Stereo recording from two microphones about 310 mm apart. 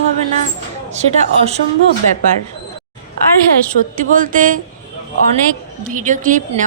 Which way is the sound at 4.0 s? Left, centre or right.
Right.